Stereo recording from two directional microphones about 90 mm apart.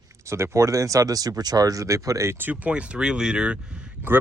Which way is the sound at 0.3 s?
30° right (ahead or behind).